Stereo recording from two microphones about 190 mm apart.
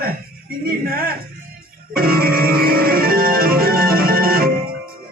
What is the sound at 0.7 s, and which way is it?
Speech, 50° right (ahead or behind).